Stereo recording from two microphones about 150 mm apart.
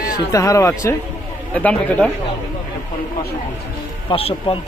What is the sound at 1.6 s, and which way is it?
Speech, 10° left (ahead or behind).